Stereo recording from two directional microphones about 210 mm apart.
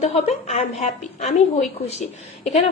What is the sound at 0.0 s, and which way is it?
A woman's voice, 30° left (ahead or behind).